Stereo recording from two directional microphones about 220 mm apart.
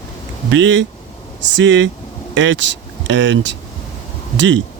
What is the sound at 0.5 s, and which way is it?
Speech, 55° right (ahead or behind).